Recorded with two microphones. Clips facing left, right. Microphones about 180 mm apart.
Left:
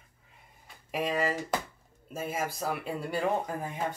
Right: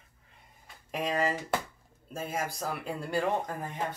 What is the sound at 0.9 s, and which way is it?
Speech, 5° left (ahead or behind).